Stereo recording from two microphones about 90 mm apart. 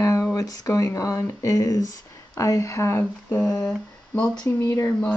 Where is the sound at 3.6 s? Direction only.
10° left (ahead or behind).